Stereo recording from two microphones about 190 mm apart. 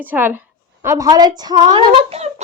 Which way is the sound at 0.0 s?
10° right (ahead or behind).